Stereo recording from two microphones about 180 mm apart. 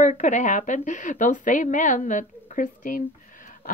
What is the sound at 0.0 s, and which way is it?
Speech, 45° left (ahead or behind).